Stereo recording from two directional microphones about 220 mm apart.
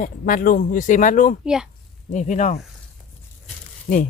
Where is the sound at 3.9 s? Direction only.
35° left (ahead or behind).